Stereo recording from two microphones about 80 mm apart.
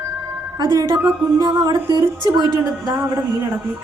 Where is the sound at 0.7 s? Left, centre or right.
Right.